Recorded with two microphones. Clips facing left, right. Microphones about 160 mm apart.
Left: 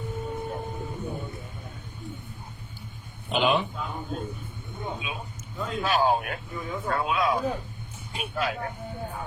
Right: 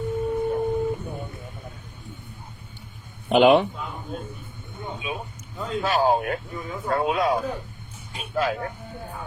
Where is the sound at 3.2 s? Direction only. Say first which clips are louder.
Right 8 dB; 65° right (ahead or behind).